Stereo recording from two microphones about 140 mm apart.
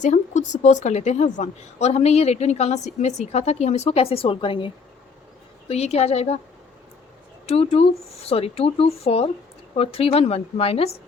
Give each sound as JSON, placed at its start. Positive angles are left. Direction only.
{"t": 0.0, "sound": "a woman's voice", "side_deg": 60}
{"t": 5.6, "sound": "a woman's voice", "side_deg": 45}
{"t": 7.4, "sound": "a woman's voice", "side_deg": 45}